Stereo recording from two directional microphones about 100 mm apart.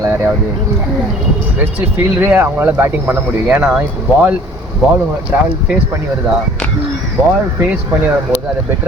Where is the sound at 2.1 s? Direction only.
20° right (ahead or behind).